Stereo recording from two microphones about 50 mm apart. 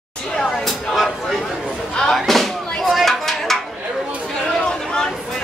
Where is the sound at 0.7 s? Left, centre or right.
Centre.